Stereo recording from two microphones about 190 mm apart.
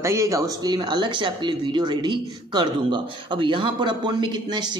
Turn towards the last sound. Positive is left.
turn(degrees=-25)  # may be behind; listen again after turning